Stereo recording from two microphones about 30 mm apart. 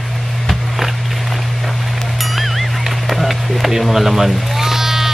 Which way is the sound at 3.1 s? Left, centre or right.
Centre.